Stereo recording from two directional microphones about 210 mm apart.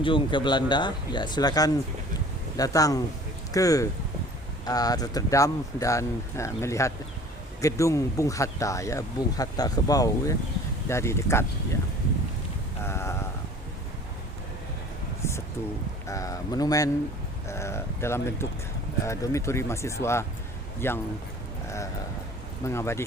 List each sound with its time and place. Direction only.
0.0 s speech: 25° left (ahead or behind)
12.8 s sheep: 10° left (ahead or behind)
15.2 s a sound: 15° left (ahead or behind)
16.0 s speech: 15° left (ahead or behind)
22.6 s speech: 15° left (ahead or behind)